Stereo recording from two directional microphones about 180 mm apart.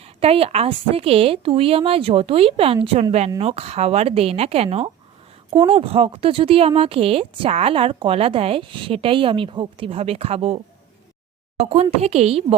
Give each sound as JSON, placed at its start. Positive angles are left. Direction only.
{"t": 0.2, "sound": "speech", "side_deg": -35}